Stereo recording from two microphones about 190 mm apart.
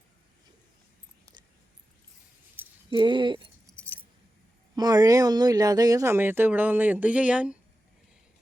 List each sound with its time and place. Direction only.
2.6 s a sound: 10° right (ahead or behind)
2.9 s keys jangling: 25° right (ahead or behind)
4.7 s speech: 20° right (ahead or behind)